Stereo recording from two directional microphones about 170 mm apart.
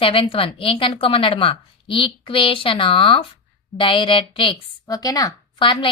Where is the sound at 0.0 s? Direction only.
35° left (ahead or behind).